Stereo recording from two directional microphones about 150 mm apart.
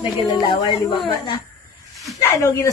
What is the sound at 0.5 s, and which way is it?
Speech, 30° left (ahead or behind).